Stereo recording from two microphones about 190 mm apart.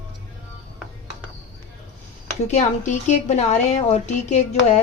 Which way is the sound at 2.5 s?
40° left (ahead or behind).